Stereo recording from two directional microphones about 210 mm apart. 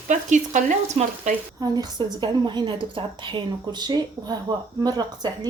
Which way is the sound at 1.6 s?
20° right (ahead or behind).